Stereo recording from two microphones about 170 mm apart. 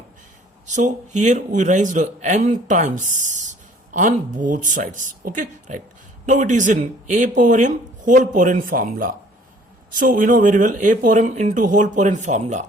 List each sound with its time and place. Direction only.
0.7 s speech: 45° right (ahead or behind)